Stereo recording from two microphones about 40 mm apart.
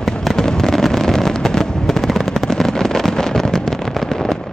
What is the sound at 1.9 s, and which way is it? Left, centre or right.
Machine gun, centre.